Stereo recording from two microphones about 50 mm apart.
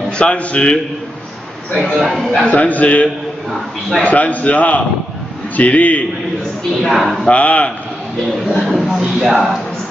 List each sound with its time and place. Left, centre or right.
0.2 s a man's voice: left
2.0 s a man's voice: centre
2.4 s a man's voice: left
6.8 s a man's voice: centre
7.2 s a man's voice: left
8.6 s a man's voice: centre